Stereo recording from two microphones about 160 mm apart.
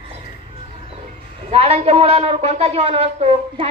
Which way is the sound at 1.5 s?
40° right (ahead or behind).